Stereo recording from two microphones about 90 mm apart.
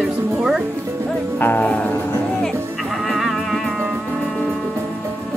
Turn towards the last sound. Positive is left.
turn(degrees=0)  # may be behind; listen again after turning